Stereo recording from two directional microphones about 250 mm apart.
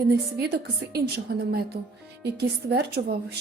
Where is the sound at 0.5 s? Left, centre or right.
Right.